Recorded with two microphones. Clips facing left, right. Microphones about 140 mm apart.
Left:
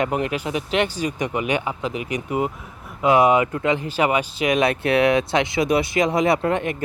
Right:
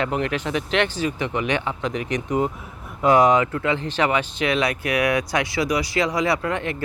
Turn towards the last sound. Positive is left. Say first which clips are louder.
# left 3 dB
turn(degrees=20)  # may be behind; listen again after turning